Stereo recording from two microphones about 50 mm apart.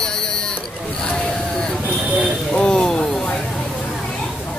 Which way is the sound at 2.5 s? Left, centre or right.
Centre.